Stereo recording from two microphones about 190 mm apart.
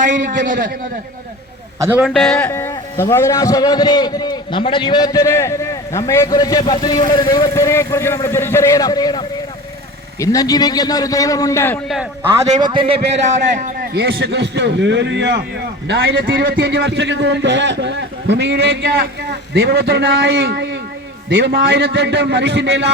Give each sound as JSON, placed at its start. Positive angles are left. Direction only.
{"t": 0.3, "sound": "a man's voice", "side_deg": -45}
{"t": 1.8, "sound": "a man's voice", "side_deg": -10}
{"t": 2.0, "sound": "a man's voice", "side_deg": 0}
{"t": 12.5, "sound": "a man's voice", "side_deg": -25}